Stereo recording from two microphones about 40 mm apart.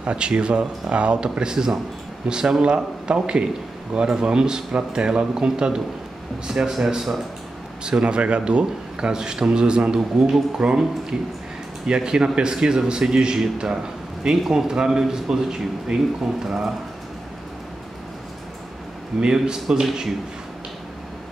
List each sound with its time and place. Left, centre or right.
0.0 s a man's voice: right; by 7.2 s centre
7.8 s a man's voice: right
19.1 s a man's voice: centre